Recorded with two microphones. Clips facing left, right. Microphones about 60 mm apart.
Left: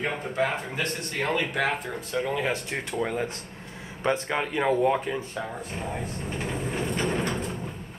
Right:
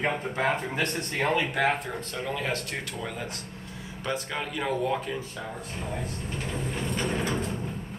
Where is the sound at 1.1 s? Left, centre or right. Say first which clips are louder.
Right 1 dB; centre.